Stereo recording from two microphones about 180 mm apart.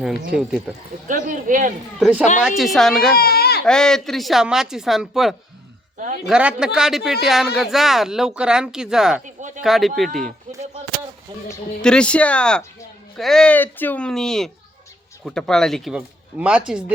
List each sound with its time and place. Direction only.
1.0 s speech: 45° right (ahead or behind)
2.0 s speech: 5° right (ahead or behind)
3.2 s a sound: 60° left (ahead or behind)
3.7 s speech: 5° left (ahead or behind)
11.8 s speech: 5° left (ahead or behind)